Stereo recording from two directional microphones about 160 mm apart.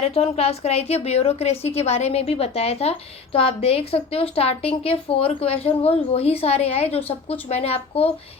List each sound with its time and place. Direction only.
0.0 s a woman's voice: 40° left (ahead or behind)